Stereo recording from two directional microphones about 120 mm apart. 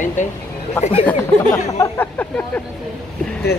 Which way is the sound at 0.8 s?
50° left (ahead or behind).